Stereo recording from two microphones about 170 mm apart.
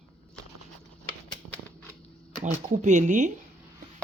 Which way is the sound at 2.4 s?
45° right (ahead or behind).